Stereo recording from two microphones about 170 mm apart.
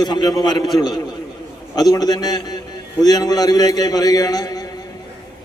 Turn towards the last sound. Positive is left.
turn(degrees=20)  # may be behind; listen again after turning